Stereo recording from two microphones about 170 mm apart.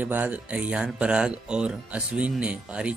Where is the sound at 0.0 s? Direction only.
10° right (ahead or behind).